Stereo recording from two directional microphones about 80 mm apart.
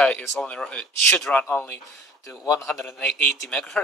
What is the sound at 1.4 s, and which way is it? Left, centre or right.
Speech, left.